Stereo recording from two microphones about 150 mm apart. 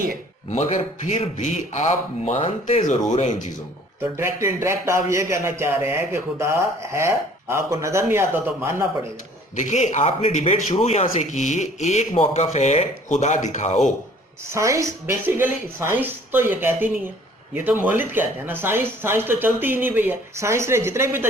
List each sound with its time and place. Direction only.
0.5 s speech: 50° left (ahead or behind)
3.1 s speech: 55° left (ahead or behind)
4.0 s speech: 20° right (ahead or behind)
9.6 s speech: 50° left (ahead or behind)
14.4 s speech: 20° right (ahead or behind)